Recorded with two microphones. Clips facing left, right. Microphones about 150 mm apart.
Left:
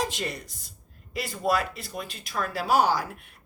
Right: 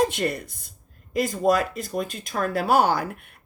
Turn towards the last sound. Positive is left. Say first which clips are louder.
# right 3 dB
turn(degrees=-55)  # may be behind; listen again after turning